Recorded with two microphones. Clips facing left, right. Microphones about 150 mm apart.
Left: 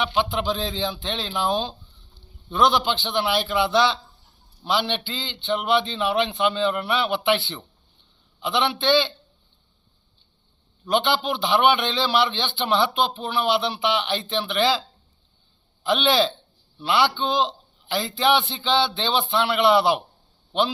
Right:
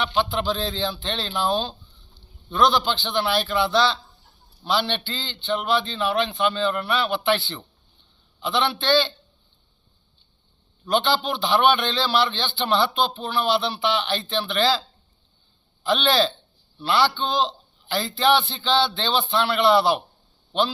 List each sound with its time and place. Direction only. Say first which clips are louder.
0.0 s a man's voice: even; 20° left (ahead or behind)
10.9 s a man's voice: even; 20° left (ahead or behind)
15.8 s a man's voice: even; 20° left (ahead or behind)